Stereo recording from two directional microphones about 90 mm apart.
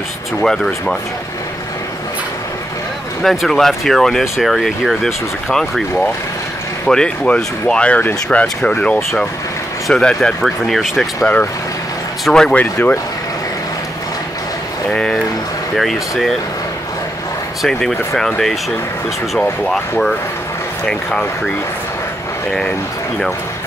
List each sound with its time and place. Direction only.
0.4 s speech: 5° left (ahead or behind)
3.2 s speech: 5° left (ahead or behind)
6.9 s speech: 10° left (ahead or behind)
12.3 s speech: 10° left (ahead or behind)
12.7 s speech: 30° left (ahead or behind)
14.9 s speech: 10° left (ahead or behind)
17.6 s speech: 5° left (ahead or behind)
19.6 s speech: 5° left (ahead or behind)